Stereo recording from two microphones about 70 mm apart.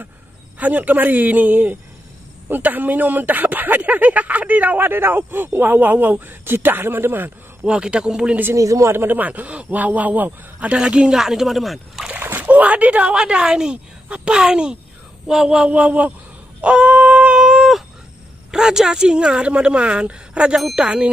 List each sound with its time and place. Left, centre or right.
0.6 s speech: right
7.6 s speech: centre
8.5 s speech: right
8.9 s speech: right
10.7 s speech: centre
12.4 s speech: right
16.6 s a sound: centre
17.4 s a sound: centre
18.5 s speech: centre